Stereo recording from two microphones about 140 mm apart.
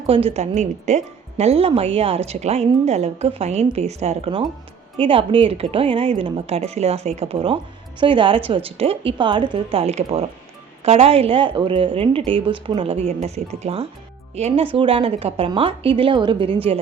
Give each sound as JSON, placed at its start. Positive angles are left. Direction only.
{"t": 0.1, "sound": "a woman's voice", "side_deg": -40}
{"t": 9.8, "sound": "a woman's voice", "side_deg": -45}